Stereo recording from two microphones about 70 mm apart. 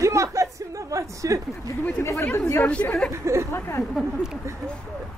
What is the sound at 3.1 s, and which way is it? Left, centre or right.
Speech, right.